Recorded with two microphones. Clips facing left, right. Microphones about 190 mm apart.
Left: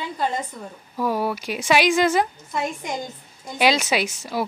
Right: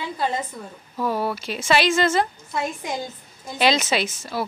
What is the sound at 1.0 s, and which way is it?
A woman's voice, 10° left (ahead or behind).